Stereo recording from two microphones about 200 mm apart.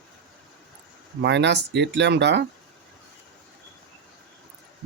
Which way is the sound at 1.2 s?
60° right (ahead or behind).